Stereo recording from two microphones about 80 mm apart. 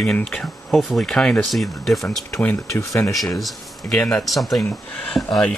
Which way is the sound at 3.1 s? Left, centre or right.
Centre.